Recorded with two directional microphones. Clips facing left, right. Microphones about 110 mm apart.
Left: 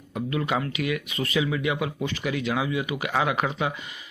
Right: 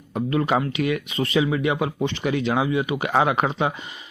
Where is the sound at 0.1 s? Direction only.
35° right (ahead or behind).